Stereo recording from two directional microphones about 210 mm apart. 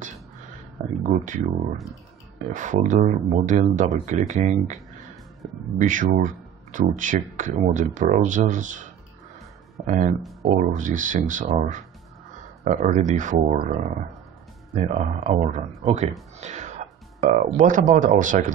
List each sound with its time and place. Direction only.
1.0 s speech: 35° right (ahead or behind)
2.5 s speech: 35° right (ahead or behind)
5.8 s speech: 40° right (ahead or behind)
9.8 s speech: 35° right (ahead or behind)
15.0 s speech: 35° right (ahead or behind)